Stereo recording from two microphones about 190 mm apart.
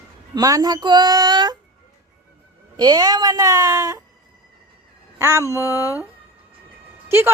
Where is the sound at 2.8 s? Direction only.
20° right (ahead or behind).